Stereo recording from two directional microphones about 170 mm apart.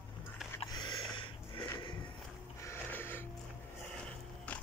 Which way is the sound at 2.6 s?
15° left (ahead or behind).